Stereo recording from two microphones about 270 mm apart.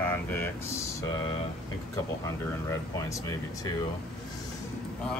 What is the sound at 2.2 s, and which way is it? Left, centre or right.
Speech, centre.